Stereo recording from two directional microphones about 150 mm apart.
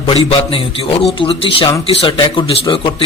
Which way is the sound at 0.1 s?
40° left (ahead or behind).